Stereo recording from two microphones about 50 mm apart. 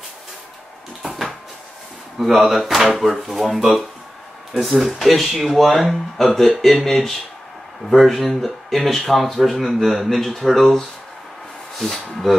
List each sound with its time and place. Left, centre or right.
1.0 s cupboard open or close: centre
2.1 s speech: centre